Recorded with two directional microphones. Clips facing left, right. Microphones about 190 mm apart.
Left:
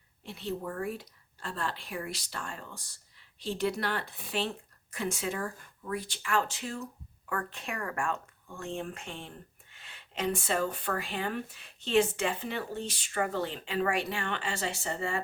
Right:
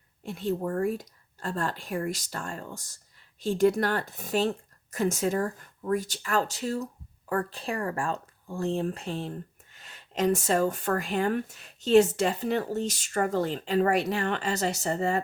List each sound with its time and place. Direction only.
0.2 s speech: 45° right (ahead or behind)